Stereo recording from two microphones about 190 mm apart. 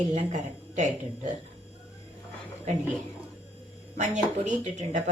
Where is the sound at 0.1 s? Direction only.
40° right (ahead or behind).